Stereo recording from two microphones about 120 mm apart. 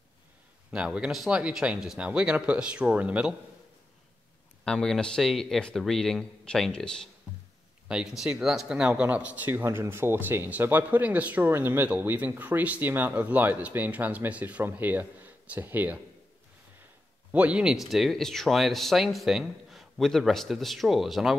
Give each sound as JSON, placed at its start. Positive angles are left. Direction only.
{"t": 0.7, "sound": "speech", "side_deg": -10}
{"t": 4.6, "sound": "speech", "side_deg": 5}
{"t": 17.3, "sound": "speech", "side_deg": -10}